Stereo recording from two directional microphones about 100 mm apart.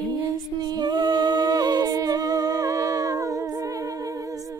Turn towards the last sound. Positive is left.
turn(degrees=-35)  # may be behind; listen again after turning